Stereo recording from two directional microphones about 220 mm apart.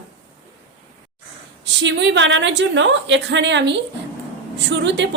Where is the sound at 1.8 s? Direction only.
55° right (ahead or behind).